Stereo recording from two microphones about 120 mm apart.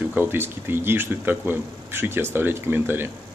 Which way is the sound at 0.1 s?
15° right (ahead or behind).